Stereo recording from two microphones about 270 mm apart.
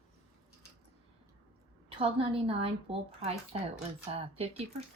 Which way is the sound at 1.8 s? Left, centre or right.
Right.